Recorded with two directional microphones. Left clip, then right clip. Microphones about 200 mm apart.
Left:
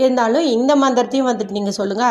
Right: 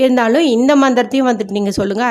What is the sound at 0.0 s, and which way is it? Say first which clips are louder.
A woman's voice: right 3 dB; 30° right (ahead or behind).